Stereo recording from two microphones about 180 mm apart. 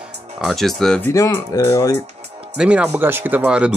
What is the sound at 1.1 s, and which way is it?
Speech, 20° left (ahead or behind).